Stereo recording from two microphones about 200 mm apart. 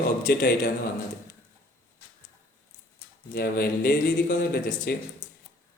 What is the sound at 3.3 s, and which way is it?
Speech, 50° left (ahead or behind).